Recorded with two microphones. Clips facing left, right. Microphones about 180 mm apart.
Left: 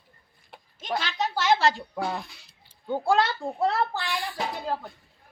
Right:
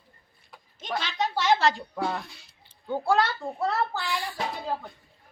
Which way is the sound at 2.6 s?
10° left (ahead or behind).